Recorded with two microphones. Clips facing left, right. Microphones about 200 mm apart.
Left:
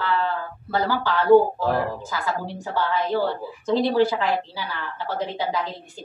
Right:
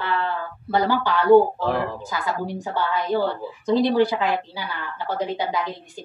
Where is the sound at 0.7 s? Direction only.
20° right (ahead or behind).